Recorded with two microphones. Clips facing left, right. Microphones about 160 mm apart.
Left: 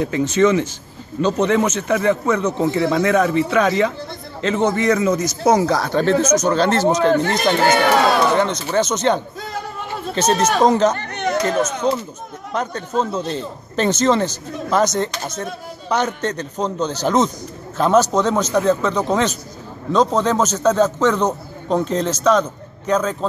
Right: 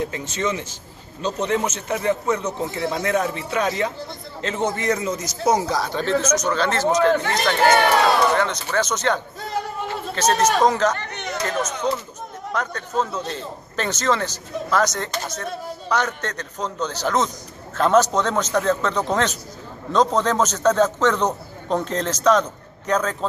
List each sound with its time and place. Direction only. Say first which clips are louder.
0.0 s a man's voice: left 9 dB; 80° left; by 11.0 s 25° left (ahead or behind)
12.5 s a man's voice: left 3 dB; 25° left (ahead or behind)
17.7 s a man's voice: left 2 dB; 10° left (ahead or behind)